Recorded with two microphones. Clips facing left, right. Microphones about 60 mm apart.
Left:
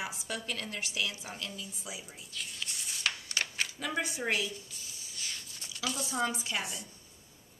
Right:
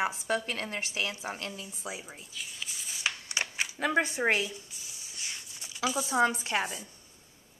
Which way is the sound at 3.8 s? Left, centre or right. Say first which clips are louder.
Right 9 dB; right.